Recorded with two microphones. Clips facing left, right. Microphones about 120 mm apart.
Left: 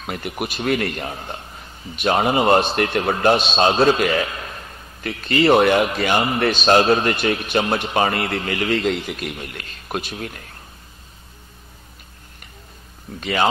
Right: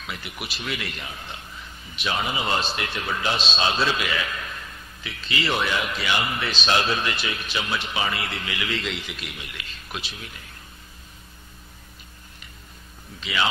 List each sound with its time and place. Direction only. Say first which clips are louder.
0.0 s a man's voice: left 9 dB; 50° left (ahead or behind)
5.0 s a man's voice: left 11 dB; 55° left (ahead or behind)
13.2 s a man's voice: left 6 dB; 45° left (ahead or behind)